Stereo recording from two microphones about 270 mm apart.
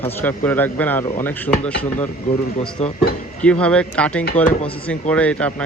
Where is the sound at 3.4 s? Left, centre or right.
Centre.